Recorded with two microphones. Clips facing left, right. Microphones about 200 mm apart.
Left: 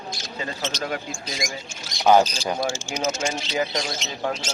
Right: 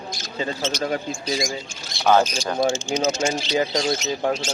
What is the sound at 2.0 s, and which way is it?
Speech, 15° left (ahead or behind).